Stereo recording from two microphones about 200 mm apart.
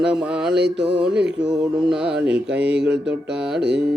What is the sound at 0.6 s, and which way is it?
Music, 55° right (ahead or behind).